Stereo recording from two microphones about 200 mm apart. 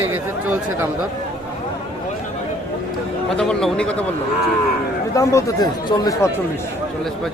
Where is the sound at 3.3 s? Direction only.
5° left (ahead or behind).